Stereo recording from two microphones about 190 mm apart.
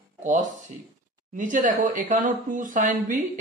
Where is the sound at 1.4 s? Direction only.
45° right (ahead or behind).